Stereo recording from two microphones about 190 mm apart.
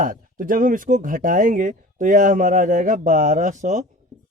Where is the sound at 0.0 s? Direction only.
45° right (ahead or behind).